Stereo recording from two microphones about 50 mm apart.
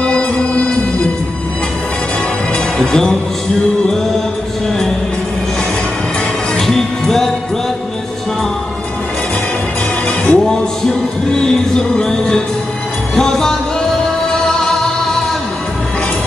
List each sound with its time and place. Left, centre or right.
0.0 s music: left
2.5 s music: centre
6.5 s music: centre
10.0 s music: left
10.4 s music: centre